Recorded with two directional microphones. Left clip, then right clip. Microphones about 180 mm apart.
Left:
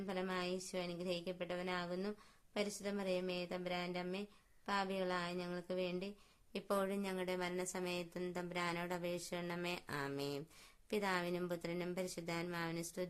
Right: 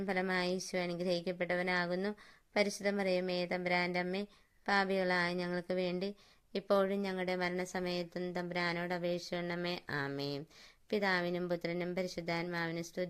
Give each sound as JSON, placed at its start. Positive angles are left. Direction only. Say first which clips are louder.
{"t": 0.0, "sound": "a woman's voice", "louder": "right 7 dB", "side_deg": -30}